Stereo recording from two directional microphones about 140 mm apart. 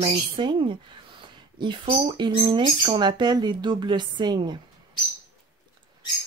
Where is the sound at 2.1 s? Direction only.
35° right (ahead or behind).